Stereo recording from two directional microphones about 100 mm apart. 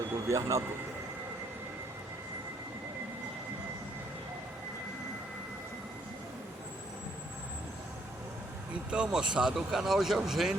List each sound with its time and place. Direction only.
0.3 s speech: 30° right (ahead or behind)
8.9 s speech: 10° right (ahead or behind)